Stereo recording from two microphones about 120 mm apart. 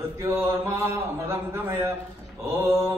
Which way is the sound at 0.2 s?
20° right (ahead or behind).